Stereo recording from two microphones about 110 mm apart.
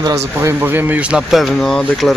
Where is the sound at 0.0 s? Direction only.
30° right (ahead or behind).